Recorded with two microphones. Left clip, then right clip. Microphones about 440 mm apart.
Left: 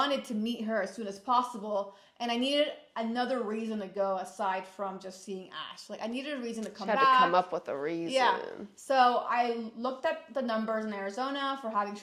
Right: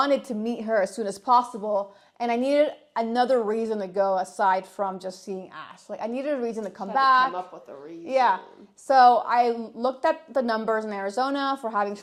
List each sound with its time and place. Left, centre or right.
0.0 s a woman's voice: right
5.2 s a woman's voice: right
7.3 s speech: left
8.9 s a woman's voice: right